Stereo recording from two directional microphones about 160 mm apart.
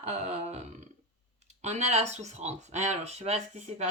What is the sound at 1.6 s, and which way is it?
Speech, 45° right (ahead or behind).